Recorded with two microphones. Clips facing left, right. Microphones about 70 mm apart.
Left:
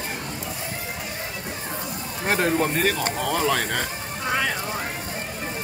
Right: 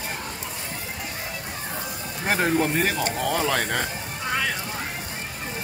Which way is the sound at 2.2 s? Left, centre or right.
Centre.